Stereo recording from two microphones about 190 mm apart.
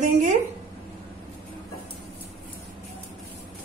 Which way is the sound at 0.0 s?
40° right (ahead or behind).